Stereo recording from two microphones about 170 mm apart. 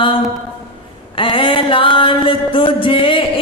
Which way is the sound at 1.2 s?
30° left (ahead or behind).